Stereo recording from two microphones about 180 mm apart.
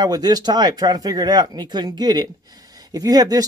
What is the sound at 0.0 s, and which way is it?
Speech, 20° right (ahead or behind).